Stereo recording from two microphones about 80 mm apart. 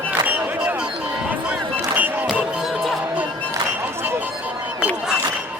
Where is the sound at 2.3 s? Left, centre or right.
Centre.